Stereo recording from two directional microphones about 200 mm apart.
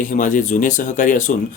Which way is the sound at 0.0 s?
40° left (ahead or behind).